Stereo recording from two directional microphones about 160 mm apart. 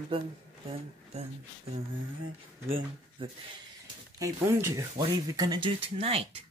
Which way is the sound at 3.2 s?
30° right (ahead or behind).